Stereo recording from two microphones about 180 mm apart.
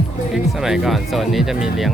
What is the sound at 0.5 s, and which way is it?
Speech, 5° right (ahead or behind).